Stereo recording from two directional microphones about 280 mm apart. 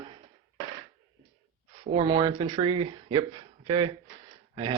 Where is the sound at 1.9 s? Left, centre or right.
Centre.